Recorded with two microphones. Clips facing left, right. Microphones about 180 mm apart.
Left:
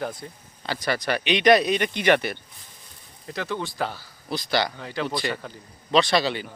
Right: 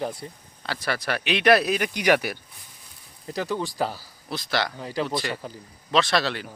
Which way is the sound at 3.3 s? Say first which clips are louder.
Right 2 dB; 35° right (ahead or behind).